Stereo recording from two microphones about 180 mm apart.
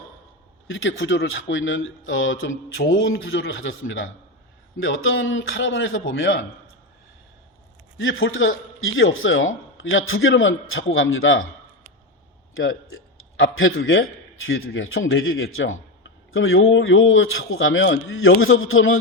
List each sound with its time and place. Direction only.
0.7 s a man's voice: 90° left
7.9 s a man's voice: 90° left
13.3 s a man's voice: 90° left